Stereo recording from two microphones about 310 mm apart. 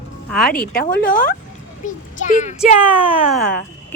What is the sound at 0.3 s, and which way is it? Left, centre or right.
Speech, centre.